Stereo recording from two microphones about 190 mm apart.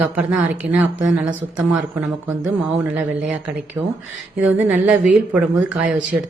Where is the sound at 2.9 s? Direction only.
10° right (ahead or behind).